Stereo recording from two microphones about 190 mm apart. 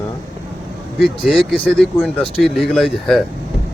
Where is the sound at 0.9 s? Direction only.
Centre (ahead or behind).